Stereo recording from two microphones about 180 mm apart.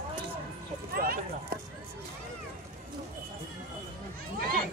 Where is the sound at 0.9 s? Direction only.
55° right (ahead or behind).